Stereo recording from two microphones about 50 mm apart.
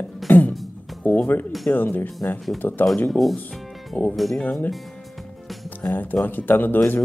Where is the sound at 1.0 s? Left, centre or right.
Left.